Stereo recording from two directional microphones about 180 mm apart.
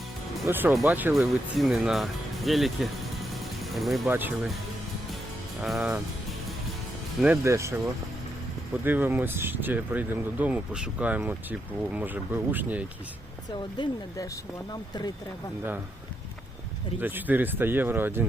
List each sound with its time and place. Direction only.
0.4 s speech: 10° right (ahead or behind)
5.6 s speech: centre (ahead or behind)
7.2 s speech: 10° right (ahead or behind)
8.8 s speech: 10° right (ahead or behind)
13.5 s speech: 25° left (ahead or behind)
17.0 s speech: 10° right (ahead or behind)